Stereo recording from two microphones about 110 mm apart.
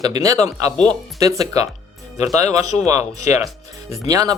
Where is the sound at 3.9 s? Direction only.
35° right (ahead or behind).